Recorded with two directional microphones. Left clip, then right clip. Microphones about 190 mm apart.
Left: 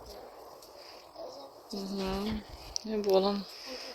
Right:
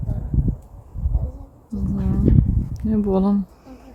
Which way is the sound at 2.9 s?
20° right (ahead or behind).